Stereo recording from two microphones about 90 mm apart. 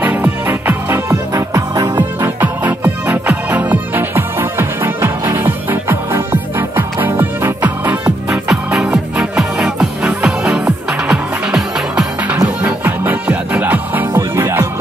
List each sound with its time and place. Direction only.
0.0 s music: 20° right (ahead or behind)
8.3 s music: 5° right (ahead or behind)
12.6 s music: 20° right (ahead or behind)
14.1 s music: 25° right (ahead or behind)